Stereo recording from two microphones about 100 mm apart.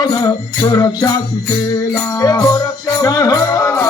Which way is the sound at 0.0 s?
45° left (ahead or behind).